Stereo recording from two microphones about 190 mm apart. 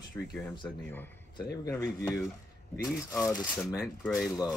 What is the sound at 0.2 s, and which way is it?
Speech, 10° left (ahead or behind).